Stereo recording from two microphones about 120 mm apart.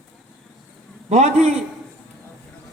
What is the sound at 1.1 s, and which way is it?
Speech, 75° right (ahead or behind).